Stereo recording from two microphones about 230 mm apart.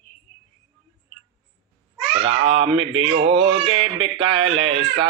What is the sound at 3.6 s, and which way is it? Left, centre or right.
A man's voice, right.